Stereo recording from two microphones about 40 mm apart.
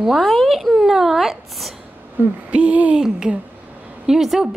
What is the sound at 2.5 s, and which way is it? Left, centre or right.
Speech, right.